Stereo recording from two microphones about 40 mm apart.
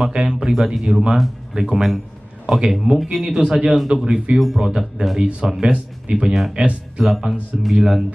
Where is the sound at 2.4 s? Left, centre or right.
Centre.